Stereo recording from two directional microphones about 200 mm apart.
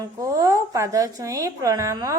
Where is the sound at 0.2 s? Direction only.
15° right (ahead or behind).